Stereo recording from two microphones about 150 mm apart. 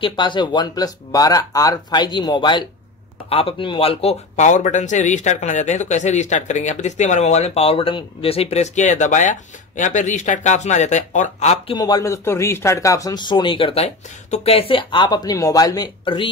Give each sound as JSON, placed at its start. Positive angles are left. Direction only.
{"t": 0.0, "sound": "speech", "side_deg": 30}
{"t": 11.7, "sound": "speech", "side_deg": 25}